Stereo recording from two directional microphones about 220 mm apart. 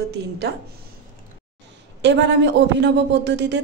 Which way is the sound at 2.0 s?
55° right (ahead or behind).